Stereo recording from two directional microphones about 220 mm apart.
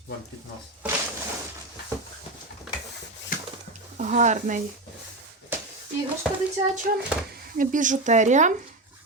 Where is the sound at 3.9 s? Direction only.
35° right (ahead or behind).